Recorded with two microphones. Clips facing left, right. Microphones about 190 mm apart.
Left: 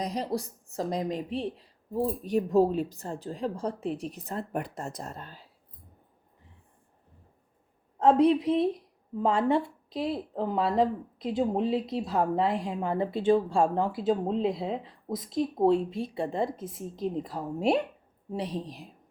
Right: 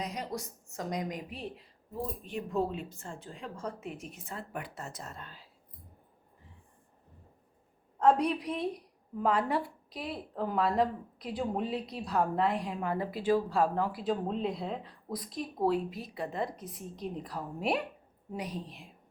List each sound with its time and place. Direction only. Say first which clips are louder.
0.0 s a woman's voice: left 6 dB; 35° left (ahead or behind)
7.9 s a woman's voice: left 5 dB; 25° left (ahead or behind)